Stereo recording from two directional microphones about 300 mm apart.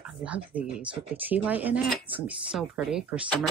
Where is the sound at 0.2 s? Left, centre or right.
Centre.